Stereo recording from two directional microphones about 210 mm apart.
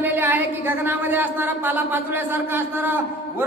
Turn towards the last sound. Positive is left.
turn(degrees=-10)  # may be behind; listen again after turning